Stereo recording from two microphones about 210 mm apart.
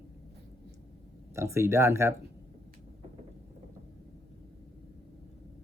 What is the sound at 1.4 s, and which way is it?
Speech, 15° right (ahead or behind).